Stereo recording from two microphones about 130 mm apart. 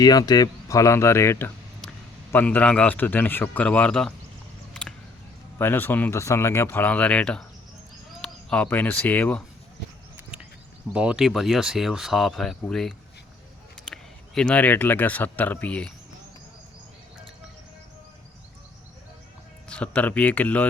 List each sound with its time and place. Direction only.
0.0 s speech: 30° left (ahead or behind); by 4.1 s 5° left (ahead or behind)
4.7 s a sound: 5° left (ahead or behind)
5.5 s speech: 15° left (ahead or behind)
10.9 s speech: 5° right (ahead or behind); by 15.9 s 10° left (ahead or behind)
19.6 s speech: 10° left (ahead or behind)